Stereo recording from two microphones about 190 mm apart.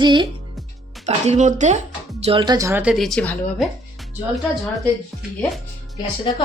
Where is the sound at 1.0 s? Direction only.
40° right (ahead or behind).